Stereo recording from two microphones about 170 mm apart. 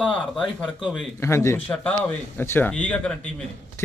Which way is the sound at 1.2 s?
15° left (ahead or behind).